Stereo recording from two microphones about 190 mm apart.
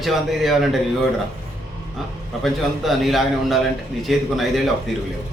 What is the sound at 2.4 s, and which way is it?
A man's voice, centre (ahead or behind).